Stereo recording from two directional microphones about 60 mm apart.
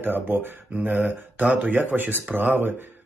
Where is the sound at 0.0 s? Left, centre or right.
Right.